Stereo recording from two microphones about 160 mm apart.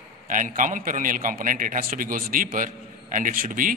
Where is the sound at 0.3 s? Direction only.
55° right (ahead or behind).